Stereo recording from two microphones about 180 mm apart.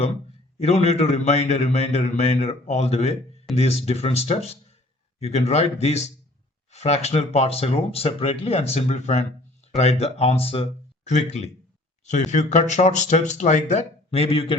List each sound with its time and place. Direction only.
0.6 s a man's voice: 35° left (ahead or behind)